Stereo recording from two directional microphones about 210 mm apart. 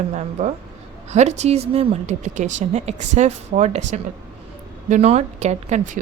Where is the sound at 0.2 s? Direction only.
35° right (ahead or behind).